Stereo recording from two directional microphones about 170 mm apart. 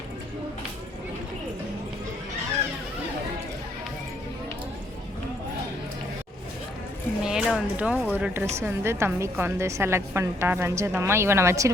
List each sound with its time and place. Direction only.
7.2 s a woman's voice: 5° right (ahead or behind)